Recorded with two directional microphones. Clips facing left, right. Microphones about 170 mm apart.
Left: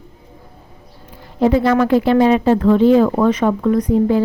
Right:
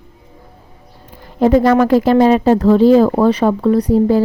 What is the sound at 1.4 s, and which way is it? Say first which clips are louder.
Speech: right 3 dB; 45° right (ahead or behind).